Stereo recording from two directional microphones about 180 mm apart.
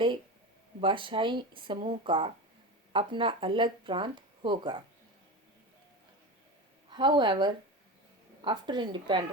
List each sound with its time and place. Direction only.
0.8 s speech: 30° right (ahead or behind)
6.9 s speech: 25° right (ahead or behind)